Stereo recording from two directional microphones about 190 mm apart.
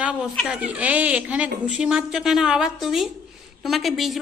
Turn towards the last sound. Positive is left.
turn(degrees=0)  # may be behind; listen again after turning